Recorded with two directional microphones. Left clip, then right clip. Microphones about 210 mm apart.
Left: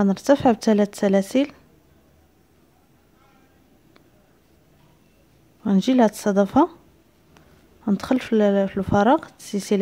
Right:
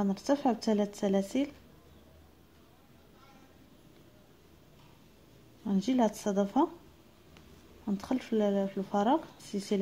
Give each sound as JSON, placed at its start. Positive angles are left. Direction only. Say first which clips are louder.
{"t": 0.0, "sound": "speech", "louder": "left 12 dB", "side_deg": 35}
{"t": 5.6, "sound": "speech", "louder": "left 11 dB", "side_deg": 40}
{"t": 7.8, "sound": "speech", "louder": "left 12 dB", "side_deg": 40}